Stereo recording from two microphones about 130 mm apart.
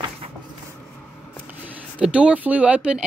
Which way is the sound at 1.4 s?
10° right (ahead or behind).